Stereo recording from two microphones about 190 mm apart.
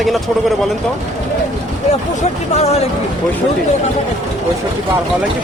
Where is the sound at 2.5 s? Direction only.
35° left (ahead or behind).